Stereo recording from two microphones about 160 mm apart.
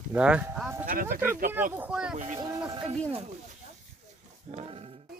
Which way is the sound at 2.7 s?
30° right (ahead or behind).